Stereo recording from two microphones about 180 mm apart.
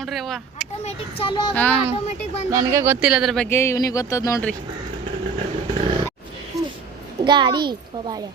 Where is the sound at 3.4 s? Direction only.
15° left (ahead or behind).